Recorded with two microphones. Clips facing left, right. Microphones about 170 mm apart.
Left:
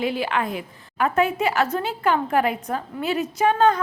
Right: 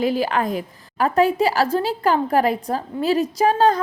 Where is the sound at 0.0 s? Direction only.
40° right (ahead or behind).